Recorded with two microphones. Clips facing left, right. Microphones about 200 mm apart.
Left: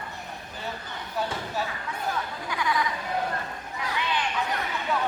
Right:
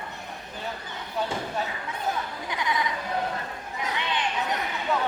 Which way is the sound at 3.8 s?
20° right (ahead or behind).